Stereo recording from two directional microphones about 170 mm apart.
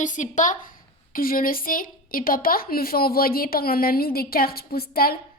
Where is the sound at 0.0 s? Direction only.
50° left (ahead or behind).